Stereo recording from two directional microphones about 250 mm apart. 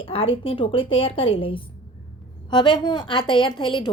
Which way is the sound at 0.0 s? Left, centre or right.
Left.